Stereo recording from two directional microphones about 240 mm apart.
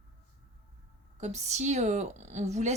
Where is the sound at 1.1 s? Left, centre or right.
Right.